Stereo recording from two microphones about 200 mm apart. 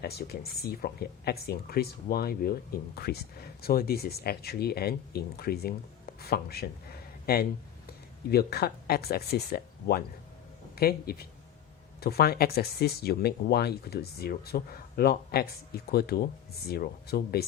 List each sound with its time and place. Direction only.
0.0 s speech: 50° left (ahead or behind)